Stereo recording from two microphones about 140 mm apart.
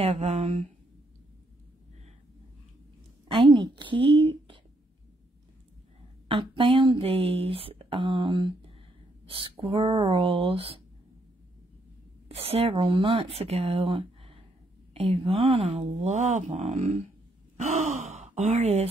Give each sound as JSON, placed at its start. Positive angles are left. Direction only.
{"t": 0.0, "sound": "speech", "side_deg": -50}
{"t": 3.3, "sound": "a woman's voice", "side_deg": -35}
{"t": 6.2, "sound": "speech", "side_deg": -35}
{"t": 9.2, "sound": "a sound", "side_deg": -40}
{"t": 9.7, "sound": "speech", "side_deg": -40}
{"t": 12.4, "sound": "speech", "side_deg": -45}